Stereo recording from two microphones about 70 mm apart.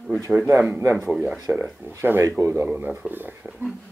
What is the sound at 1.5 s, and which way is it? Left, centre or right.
Speech, centre.